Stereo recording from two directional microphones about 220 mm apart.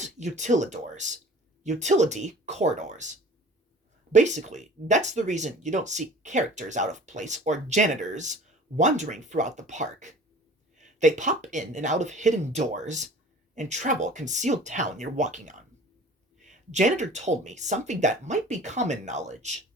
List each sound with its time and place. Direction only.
0.0 s speech: 30° right (ahead or behind)